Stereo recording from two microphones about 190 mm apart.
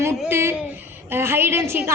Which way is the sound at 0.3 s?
10° right (ahead or behind).